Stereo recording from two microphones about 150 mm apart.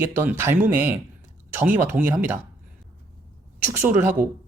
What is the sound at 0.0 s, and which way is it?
Speech, 15° right (ahead or behind).